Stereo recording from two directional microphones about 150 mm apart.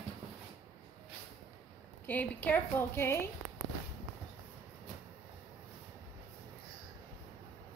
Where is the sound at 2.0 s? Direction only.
10° left (ahead or behind).